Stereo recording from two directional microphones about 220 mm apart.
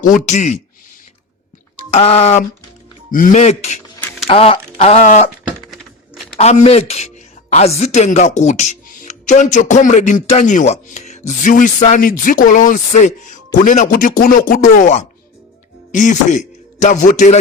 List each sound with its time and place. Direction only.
0.0 s speech: 35° left (ahead or behind)
1.9 s speech: 30° left (ahead or behind)
6.3 s a man's voice: 30° left (ahead or behind)